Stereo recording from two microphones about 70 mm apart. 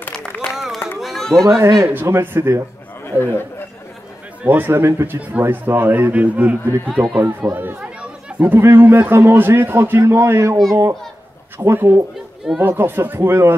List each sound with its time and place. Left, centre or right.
0.3 s a sound: left
1.0 s run: centre
1.4 s a man's voice: right
2.0 s a man's voice: right
3.1 s speech: left
4.4 s a man's voice: right
7.2 s a man's voice: right
10.7 s a child's voice: right
11.5 s a man's voice: right